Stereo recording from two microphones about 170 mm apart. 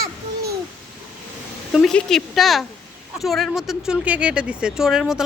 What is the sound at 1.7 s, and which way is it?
A child's voice, 5° left (ahead or behind).